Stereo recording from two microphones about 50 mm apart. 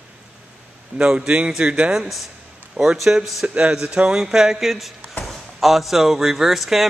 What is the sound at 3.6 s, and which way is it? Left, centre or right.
A man's voice, centre.